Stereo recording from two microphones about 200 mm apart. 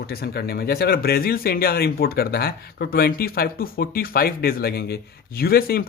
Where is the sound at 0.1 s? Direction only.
50° left (ahead or behind).